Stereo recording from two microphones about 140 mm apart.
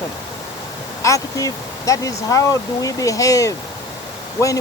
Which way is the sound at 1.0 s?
25° left (ahead or behind).